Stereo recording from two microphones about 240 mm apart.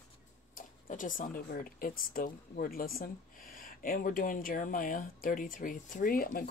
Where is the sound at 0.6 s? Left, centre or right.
Left.